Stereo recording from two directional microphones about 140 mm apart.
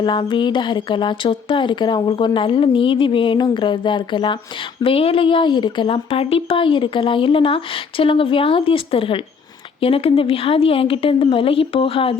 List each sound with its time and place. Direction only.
0.0 s speech: 35° left (ahead or behind)